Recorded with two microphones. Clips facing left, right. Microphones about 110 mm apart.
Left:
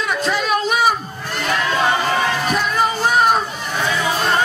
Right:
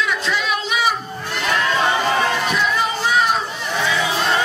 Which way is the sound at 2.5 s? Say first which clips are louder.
Left 2 dB; 45° left (ahead or behind).